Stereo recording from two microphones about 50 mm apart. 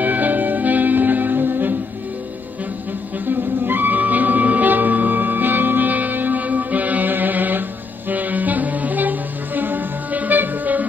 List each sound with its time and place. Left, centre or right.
0.0 s music: right
3.3 s music: right